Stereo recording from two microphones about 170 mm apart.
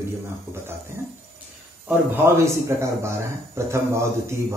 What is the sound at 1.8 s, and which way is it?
Speech, 15° right (ahead or behind).